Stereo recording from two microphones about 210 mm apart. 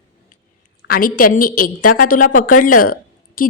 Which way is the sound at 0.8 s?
45° left (ahead or behind).